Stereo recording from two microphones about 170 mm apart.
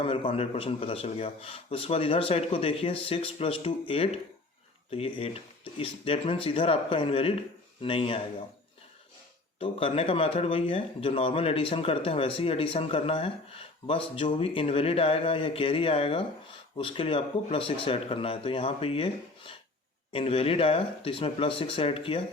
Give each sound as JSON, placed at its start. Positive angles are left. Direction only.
{"t": 0.0, "sound": "speech", "side_deg": 30}
{"t": 9.6, "sound": "speech", "side_deg": 35}